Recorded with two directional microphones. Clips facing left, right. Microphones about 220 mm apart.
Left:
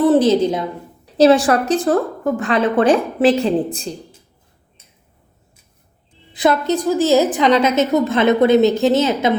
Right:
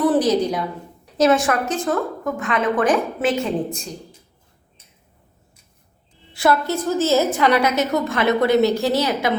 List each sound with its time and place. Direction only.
0.0 s a woman's voice: 25° left (ahead or behind)
6.3 s a woman's voice: 20° left (ahead or behind)